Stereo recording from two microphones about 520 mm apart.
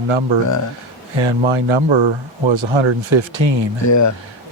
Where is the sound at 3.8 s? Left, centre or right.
Left.